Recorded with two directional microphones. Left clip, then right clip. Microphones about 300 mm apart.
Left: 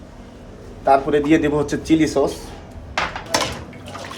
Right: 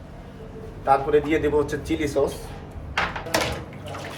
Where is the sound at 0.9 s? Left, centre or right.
Left.